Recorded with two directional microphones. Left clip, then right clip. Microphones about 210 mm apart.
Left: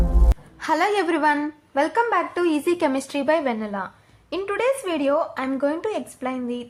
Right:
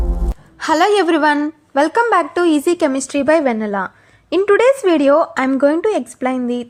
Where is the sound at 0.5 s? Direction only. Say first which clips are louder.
Right 8 dB; 30° right (ahead or behind).